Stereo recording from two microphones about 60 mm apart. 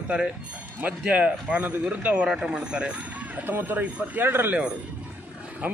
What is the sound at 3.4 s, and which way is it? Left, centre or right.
Speech, right.